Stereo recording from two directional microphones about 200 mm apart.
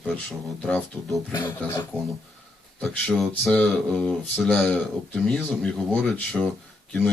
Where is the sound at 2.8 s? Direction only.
Centre (ahead or behind).